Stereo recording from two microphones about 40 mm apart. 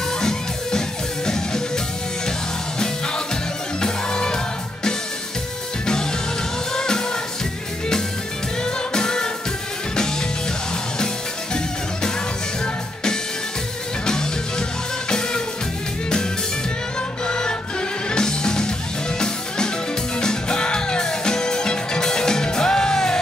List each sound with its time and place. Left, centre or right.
0.2 s music: centre
3.8 s music: centre
6.7 s music: centre
8.6 s music: centre
15.0 s music: centre
17.3 s music: left